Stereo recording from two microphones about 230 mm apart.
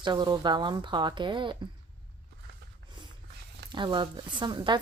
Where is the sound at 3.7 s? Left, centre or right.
Centre.